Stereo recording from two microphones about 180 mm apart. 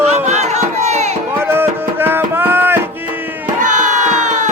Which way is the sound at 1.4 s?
10° right (ahead or behind).